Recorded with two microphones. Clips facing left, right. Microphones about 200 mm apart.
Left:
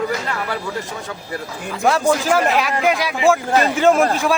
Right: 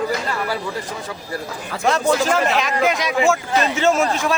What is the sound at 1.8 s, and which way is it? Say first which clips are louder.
A man's voice: left 1 dB; 10° left (ahead or behind).